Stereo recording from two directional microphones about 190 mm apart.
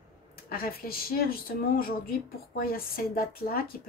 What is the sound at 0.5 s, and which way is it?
Speech, 50° left (ahead or behind).